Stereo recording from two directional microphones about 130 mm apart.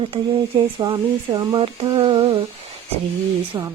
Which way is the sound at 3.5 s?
25° right (ahead or behind).